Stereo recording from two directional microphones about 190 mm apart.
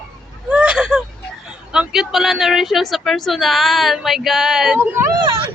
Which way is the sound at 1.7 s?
5° right (ahead or behind).